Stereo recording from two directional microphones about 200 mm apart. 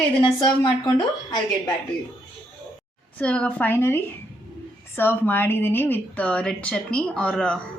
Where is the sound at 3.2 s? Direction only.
5° left (ahead or behind).